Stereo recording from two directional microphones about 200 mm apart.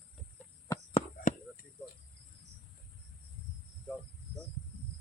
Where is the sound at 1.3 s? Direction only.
40° left (ahead or behind).